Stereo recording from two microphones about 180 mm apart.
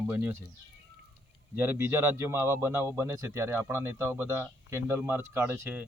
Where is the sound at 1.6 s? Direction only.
10° right (ahead or behind).